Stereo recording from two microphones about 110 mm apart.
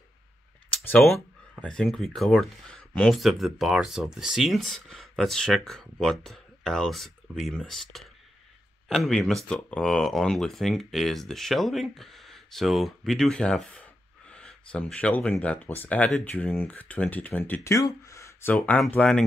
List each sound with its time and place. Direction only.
1.0 s a sound: 5° left (ahead or behind)
1.6 s speech: 5° left (ahead or behind)
17.6 s speech: 30° left (ahead or behind)
18.5 s speech: 15° left (ahead or behind)